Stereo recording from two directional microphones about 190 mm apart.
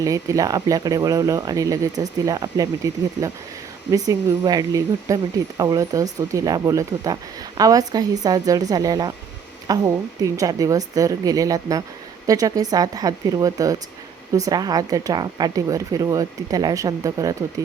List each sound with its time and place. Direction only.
0.0 s speech: 20° right (ahead or behind)